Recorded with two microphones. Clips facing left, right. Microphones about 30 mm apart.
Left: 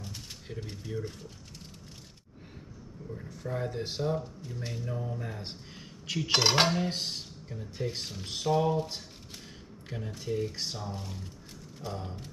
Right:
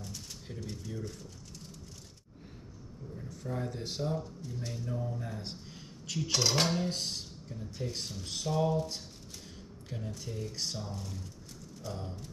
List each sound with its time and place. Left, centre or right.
0.0 s pigeon: left
0.5 s speech: left
3.2 s speech: left
6.0 s cutlery: left
6.3 s speech: left